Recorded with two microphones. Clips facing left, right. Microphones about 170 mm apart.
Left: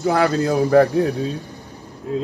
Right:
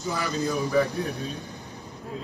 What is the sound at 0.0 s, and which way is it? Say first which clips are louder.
Speech: left 10 dB; 75° left (ahead or behind).